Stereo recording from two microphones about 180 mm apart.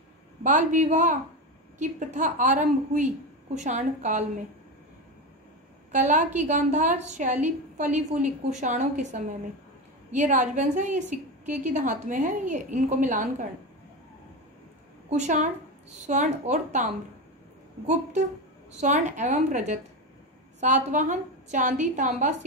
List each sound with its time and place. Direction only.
0.4 s a woman's voice: 45° right (ahead or behind)
5.9 s a woman's voice: 40° right (ahead or behind)
15.0 s a woman's voice: 40° right (ahead or behind)
18.7 s a woman's voice: 40° right (ahead or behind)